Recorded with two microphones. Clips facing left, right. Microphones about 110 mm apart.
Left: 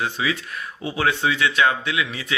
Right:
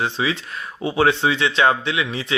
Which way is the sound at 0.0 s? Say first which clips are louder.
Right 2 dB; 30° right (ahead or behind).